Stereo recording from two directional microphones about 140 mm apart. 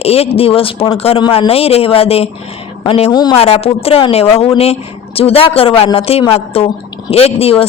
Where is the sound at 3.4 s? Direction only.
45° left (ahead or behind).